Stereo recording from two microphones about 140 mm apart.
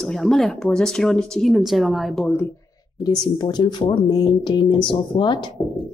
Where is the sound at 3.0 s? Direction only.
30° left (ahead or behind).